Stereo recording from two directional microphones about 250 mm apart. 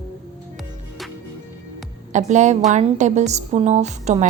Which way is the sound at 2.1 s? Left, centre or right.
Right.